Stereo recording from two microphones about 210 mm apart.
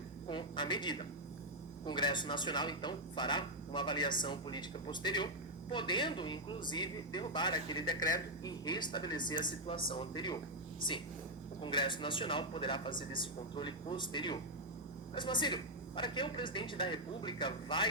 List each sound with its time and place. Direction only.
0.3 s a man's voice: 20° left (ahead or behind)
11.6 s a man's voice: 20° left (ahead or behind)